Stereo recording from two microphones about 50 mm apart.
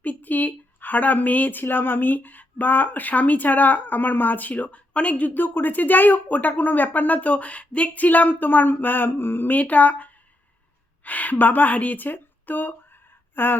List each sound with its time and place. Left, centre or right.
0.0 s speech: left